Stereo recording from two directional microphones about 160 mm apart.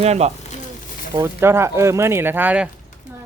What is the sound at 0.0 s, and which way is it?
Speech, 40° right (ahead or behind).